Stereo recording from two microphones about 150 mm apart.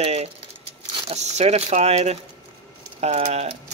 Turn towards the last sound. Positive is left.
turn(degrees=-45)  # may be behind; listen again after turning